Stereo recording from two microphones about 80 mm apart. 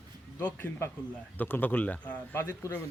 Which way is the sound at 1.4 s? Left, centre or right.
Left.